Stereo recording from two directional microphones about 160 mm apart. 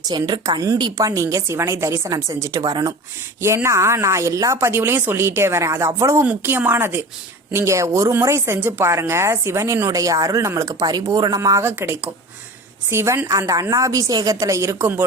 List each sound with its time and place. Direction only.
0.1 s a woman's voice: 25° right (ahead or behind)